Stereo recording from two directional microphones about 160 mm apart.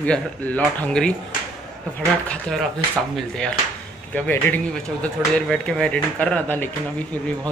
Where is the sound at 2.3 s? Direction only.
5° left (ahead or behind).